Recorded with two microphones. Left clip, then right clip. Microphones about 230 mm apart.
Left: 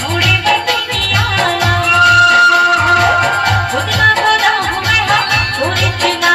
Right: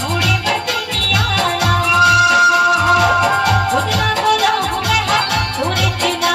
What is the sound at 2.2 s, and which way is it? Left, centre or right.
Music, right.